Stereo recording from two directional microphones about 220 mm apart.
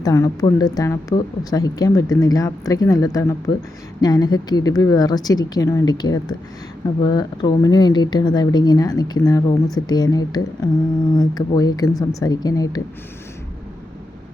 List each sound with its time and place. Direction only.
0.0 s speech: 15° left (ahead or behind)